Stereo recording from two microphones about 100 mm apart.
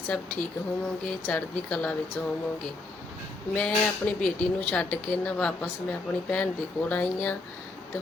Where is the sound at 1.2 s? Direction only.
15° left (ahead or behind).